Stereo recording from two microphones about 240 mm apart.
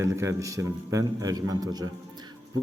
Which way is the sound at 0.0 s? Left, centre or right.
Centre.